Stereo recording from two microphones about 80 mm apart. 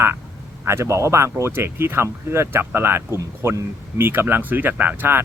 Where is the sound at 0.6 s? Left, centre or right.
Right.